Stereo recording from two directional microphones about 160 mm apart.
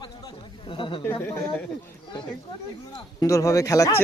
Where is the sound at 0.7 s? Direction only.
30° left (ahead or behind).